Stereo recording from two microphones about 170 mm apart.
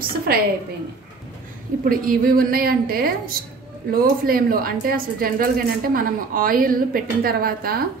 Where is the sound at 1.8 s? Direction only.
55° right (ahead or behind).